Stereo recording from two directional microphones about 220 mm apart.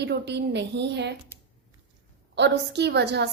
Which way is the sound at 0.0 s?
50° right (ahead or behind).